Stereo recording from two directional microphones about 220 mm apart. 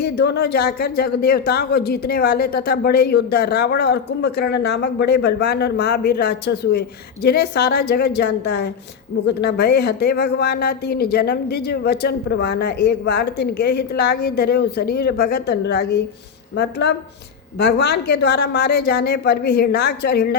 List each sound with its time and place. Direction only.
0.0 s speech: 50° left (ahead or behind)